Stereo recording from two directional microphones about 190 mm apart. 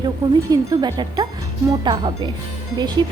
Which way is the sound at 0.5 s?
20° right (ahead or behind).